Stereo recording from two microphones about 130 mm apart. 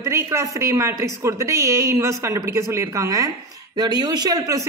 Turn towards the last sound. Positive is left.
turn(degrees=-25)  # may be behind; listen again after turning